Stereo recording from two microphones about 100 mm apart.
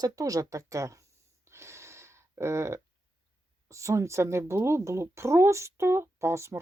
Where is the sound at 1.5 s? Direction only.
30° right (ahead or behind).